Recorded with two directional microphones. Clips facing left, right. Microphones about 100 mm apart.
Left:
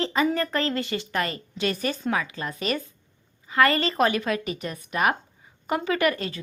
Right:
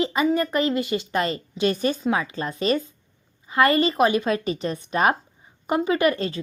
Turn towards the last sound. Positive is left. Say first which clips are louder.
# right 3 dB
turn(degrees=-25)  # may be behind; listen again after turning